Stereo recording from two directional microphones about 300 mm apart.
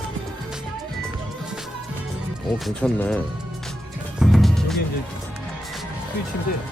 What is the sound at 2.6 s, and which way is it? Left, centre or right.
Speech, centre.